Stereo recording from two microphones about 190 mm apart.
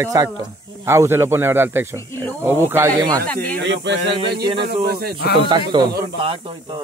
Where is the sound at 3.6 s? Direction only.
70° right (ahead or behind).